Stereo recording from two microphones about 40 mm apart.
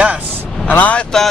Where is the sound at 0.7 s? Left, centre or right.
Left.